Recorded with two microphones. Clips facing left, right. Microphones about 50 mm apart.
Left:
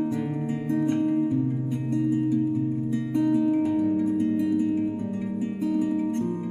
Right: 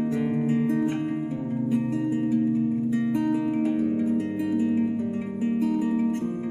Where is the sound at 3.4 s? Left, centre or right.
Right.